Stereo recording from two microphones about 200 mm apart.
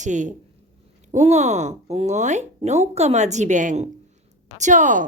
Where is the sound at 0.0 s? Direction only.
40° right (ahead or behind).